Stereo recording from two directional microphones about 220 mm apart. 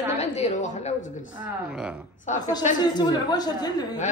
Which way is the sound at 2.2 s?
35° left (ahead or behind).